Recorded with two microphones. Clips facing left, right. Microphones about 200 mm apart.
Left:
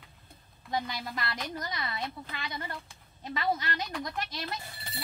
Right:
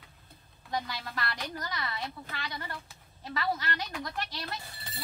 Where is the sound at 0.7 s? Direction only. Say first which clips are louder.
Left 2 dB; 20° left (ahead or behind).